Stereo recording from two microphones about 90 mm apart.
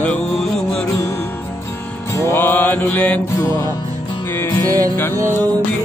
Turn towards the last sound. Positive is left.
turn(degrees=25)  # may be behind; listen again after turning